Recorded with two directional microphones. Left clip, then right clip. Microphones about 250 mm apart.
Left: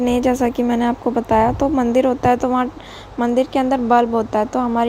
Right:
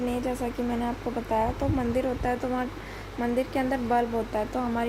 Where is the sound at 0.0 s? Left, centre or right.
Left.